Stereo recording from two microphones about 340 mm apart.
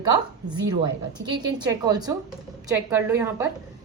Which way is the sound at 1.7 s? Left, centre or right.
Centre.